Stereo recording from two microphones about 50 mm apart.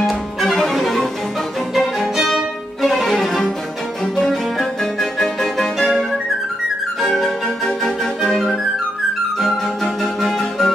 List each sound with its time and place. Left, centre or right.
0.0 s cello: centre
2.1 s music: centre
10.2 s music: centre